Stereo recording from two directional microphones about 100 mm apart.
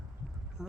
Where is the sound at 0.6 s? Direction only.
5° right (ahead or behind).